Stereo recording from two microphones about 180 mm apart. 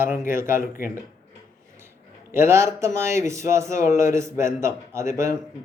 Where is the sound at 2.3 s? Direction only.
15° right (ahead or behind).